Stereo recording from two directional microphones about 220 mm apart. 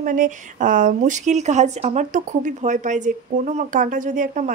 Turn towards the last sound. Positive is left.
turn(degrees=-35)  # may be behind; listen again after turning